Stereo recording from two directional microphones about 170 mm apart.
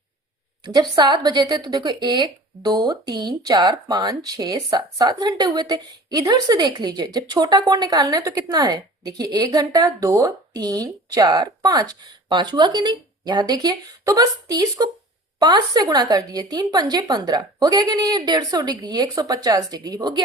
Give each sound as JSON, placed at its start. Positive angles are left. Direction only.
{"t": 0.6, "sound": "speech", "side_deg": -25}